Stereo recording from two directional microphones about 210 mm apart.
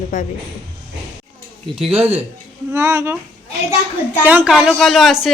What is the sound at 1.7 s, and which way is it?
Speech, 5° right (ahead or behind).